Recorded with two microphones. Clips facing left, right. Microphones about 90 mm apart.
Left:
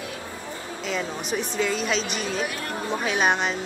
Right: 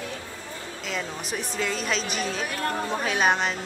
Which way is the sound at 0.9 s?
Centre (ahead or behind).